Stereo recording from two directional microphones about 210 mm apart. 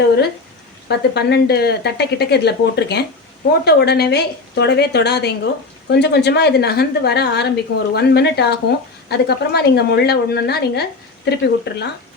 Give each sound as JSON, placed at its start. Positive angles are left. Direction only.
{"t": 0.9, "sound": "a woman's voice", "side_deg": 50}